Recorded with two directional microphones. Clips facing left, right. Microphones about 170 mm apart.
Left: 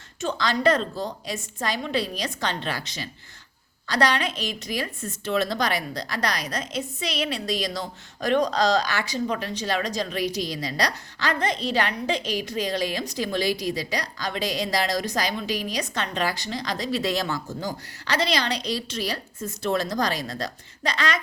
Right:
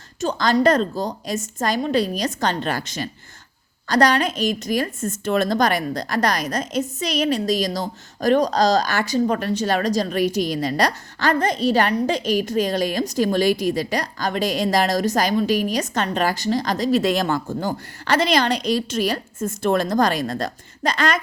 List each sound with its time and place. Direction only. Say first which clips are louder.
0.2 s a woman's voice: right 6 dB; 40° right (ahead or behind)